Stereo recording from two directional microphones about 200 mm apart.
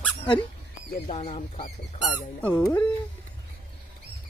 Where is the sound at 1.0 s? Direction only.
30° left (ahead or behind).